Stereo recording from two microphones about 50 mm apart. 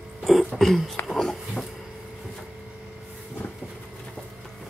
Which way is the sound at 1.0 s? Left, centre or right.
Centre.